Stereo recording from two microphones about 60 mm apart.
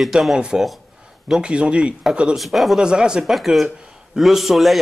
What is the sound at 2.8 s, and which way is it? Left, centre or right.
Speech, centre.